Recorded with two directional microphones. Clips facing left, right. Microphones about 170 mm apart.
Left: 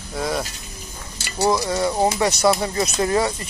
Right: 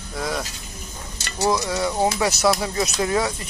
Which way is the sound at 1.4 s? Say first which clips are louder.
Left 2 dB; 25° left (ahead or behind).